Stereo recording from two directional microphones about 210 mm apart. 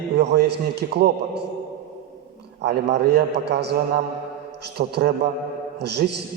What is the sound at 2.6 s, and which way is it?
A man's voice, 50° right (ahead or behind).